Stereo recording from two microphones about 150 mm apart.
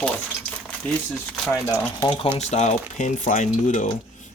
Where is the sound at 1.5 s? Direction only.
20° left (ahead or behind).